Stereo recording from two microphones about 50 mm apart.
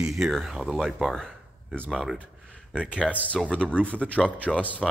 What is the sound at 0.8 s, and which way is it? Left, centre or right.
Speech, centre.